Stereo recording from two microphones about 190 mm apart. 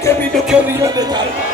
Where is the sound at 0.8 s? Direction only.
20° right (ahead or behind).